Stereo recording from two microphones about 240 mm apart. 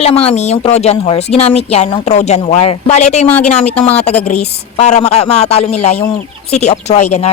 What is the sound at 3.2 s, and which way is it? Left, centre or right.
Speech, centre.